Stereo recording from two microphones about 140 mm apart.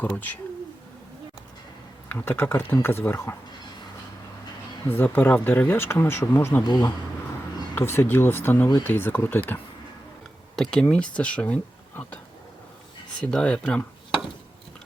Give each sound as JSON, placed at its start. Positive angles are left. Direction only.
{"t": 0.1, "sound": "speech", "side_deg": 15}
{"t": 2.0, "sound": "speech", "side_deg": 15}
{"t": 4.9, "sound": "speech", "side_deg": 15}
{"t": 6.6, "sound": "speech", "side_deg": 30}
{"t": 7.8, "sound": "speech", "side_deg": 15}
{"t": 10.5, "sound": "speech", "side_deg": 5}
{"t": 13.3, "sound": "speech", "side_deg": 5}